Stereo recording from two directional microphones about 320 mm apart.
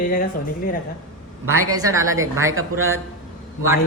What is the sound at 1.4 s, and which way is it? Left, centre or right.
Speech, right.